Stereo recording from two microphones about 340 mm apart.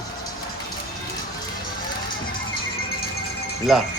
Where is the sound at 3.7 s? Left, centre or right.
Centre.